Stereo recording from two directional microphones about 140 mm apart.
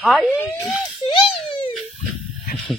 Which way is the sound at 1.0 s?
40° left (ahead or behind).